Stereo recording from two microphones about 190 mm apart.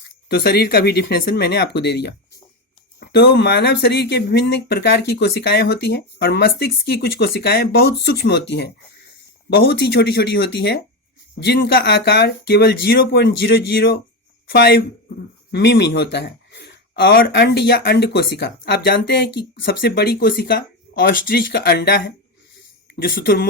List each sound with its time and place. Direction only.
0.3 s speech: 55° left (ahead or behind)